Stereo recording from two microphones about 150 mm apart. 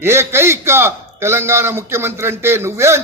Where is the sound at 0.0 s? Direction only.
15° right (ahead or behind).